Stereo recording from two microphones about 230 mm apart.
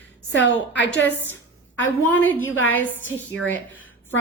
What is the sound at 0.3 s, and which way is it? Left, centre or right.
Speech, left.